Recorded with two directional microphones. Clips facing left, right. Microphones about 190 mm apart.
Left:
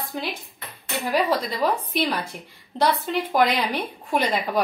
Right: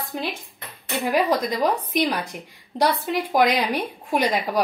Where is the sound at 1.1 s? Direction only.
15° right (ahead or behind).